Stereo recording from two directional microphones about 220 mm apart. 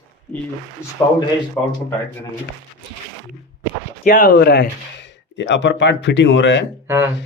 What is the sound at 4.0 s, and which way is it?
Speech, 40° left (ahead or behind).